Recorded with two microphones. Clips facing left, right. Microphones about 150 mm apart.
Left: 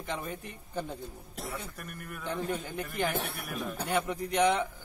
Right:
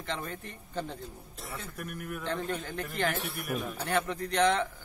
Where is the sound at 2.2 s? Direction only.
10° left (ahead or behind).